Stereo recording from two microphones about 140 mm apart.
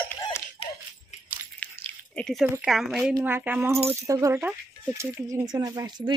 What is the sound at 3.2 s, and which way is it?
Speech, 15° right (ahead or behind).